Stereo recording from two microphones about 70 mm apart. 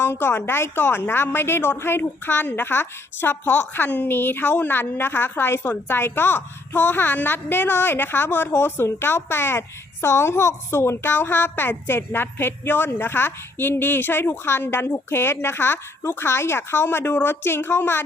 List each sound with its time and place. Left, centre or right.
0.0 s a woman's voice: left